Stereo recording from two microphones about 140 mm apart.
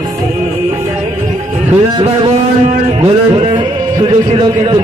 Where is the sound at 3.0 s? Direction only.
35° right (ahead or behind).